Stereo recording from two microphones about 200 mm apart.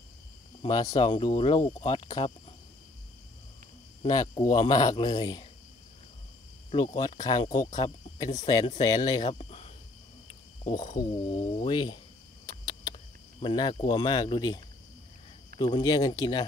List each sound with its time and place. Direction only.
0.6 s speech: 20° left (ahead or behind)
4.0 s speech: 20° left (ahead or behind)
6.7 s speech: 25° left (ahead or behind)
10.7 s speech: 20° left (ahead or behind)
12.4 s a sound: 20° left (ahead or behind)
13.4 s speech: 25° left (ahead or behind)